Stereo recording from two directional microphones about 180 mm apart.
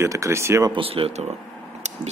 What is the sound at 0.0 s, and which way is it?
Speech, 15° right (ahead or behind).